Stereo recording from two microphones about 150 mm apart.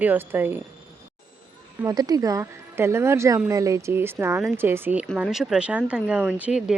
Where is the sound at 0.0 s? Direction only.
10° right (ahead or behind).